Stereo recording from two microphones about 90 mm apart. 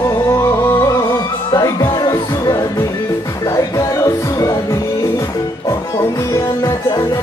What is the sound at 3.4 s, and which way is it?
Music, 35° left (ahead or behind).